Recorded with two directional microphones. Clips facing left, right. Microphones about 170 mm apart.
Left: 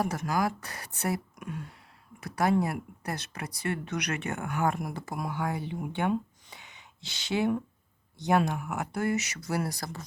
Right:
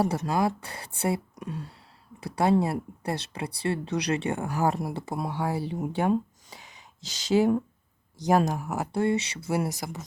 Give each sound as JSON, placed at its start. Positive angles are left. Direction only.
{"t": 0.0, "sound": "speech", "side_deg": -30}